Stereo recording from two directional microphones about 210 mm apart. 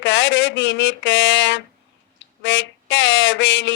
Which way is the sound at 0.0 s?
60° left (ahead or behind).